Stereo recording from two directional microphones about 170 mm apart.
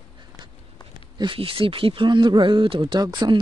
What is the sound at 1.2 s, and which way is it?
Speech, 30° right (ahead or behind).